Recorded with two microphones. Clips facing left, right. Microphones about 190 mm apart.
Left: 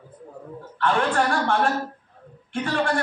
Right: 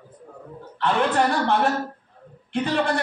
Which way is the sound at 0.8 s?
20° right (ahead or behind).